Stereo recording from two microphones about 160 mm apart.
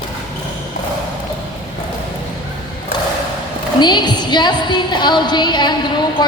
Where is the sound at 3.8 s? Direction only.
30° left (ahead or behind).